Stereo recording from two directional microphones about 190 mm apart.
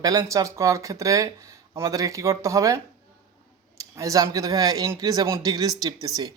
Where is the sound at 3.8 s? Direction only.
15° right (ahead or behind).